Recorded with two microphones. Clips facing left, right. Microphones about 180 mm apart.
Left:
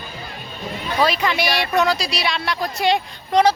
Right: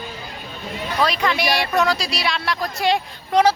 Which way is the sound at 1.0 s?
5° left (ahead or behind).